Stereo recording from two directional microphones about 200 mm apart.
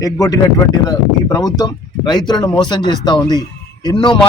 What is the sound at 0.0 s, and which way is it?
Speech, 20° left (ahead or behind).